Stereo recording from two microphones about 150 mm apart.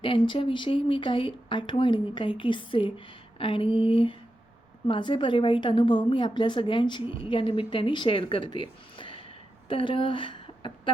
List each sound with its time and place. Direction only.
0.0 s a woman's voice: 35° left (ahead or behind)